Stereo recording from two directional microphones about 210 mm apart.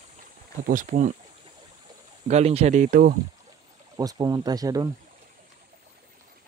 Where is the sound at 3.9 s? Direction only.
15° right (ahead or behind).